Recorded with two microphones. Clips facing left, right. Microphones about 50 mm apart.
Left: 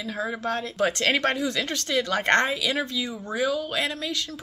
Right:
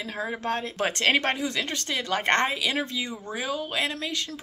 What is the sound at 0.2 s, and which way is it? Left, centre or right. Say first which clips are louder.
Speech: left 1 dB; right.